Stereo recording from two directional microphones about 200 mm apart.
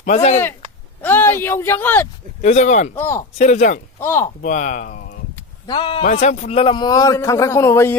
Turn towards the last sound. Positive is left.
turn(degrees=15)  # may be behind; listen again after turning